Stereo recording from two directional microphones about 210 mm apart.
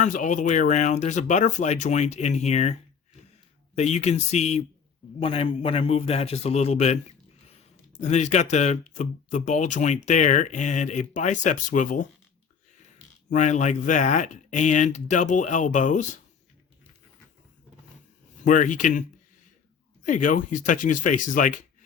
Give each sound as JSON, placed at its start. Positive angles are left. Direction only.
{"t": 0.0, "sound": "speech", "side_deg": 35}
{"t": 3.8, "sound": "a man's voice", "side_deg": 30}
{"t": 13.3, "sound": "speech", "side_deg": 35}
{"t": 18.4, "sound": "speech", "side_deg": 40}
{"t": 20.1, "sound": "speech", "side_deg": 40}